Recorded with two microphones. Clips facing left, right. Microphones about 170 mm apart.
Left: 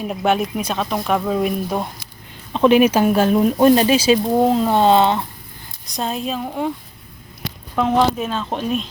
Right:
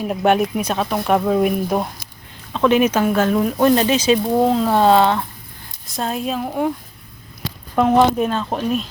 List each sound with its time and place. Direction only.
0.0 s speech: 5° right (ahead or behind)
2.5 s speech: 15° left (ahead or behind)
4.7 s speech: 20° left (ahead or behind)
6.0 s speech: centre (ahead or behind)
7.8 s speech: 10° right (ahead or behind)